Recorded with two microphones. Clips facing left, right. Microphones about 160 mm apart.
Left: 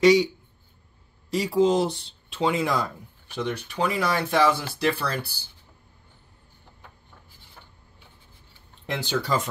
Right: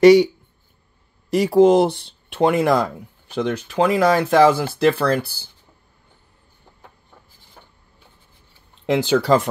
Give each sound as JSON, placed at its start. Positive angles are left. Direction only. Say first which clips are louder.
{"t": 0.0, "sound": "speech", "louder": "right 7 dB", "side_deg": -65}
{"t": 1.3, "sound": "speech", "louder": "right 8 dB", "side_deg": -65}
{"t": 3.3, "sound": "speech", "louder": "right 7 dB", "side_deg": -90}
{"t": 8.8, "sound": "speech", "louder": "right 11 dB", "side_deg": -90}